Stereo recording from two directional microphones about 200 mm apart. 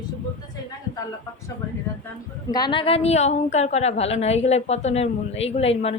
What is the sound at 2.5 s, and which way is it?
A woman's voice, 20° left (ahead or behind).